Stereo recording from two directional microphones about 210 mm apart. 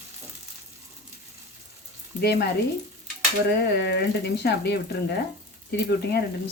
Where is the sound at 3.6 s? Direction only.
50° left (ahead or behind).